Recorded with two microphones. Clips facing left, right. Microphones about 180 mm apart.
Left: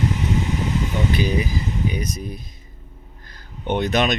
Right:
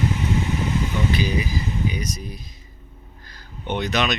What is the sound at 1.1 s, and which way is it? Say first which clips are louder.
Speech: left 2 dB; 50° left (ahead or behind).